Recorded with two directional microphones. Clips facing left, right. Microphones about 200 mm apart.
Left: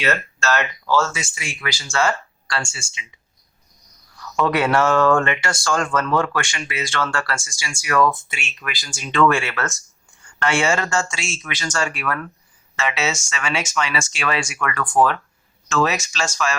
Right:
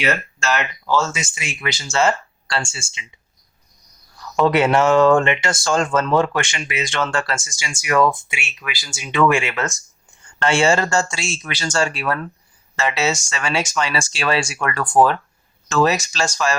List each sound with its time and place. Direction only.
0.0 s speech: 15° right (ahead or behind)
4.4 s speech: 25° right (ahead or behind)
10.4 s speech: 30° right (ahead or behind)